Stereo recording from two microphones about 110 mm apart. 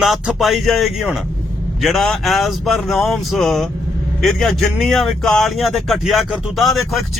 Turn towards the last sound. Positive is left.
turn(degrees=0)  # may be behind; listen again after turning